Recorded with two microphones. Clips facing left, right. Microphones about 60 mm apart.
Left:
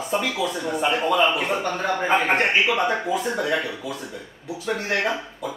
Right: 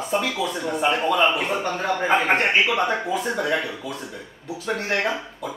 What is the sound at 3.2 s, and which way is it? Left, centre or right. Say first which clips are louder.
Speech: even; centre.